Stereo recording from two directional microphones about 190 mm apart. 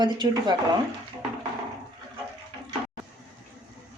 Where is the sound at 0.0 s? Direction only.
25° right (ahead or behind).